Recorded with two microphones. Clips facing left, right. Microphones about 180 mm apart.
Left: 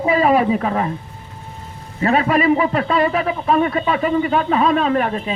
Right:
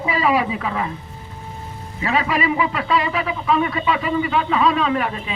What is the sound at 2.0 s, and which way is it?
A man's voice, 45° left (ahead or behind).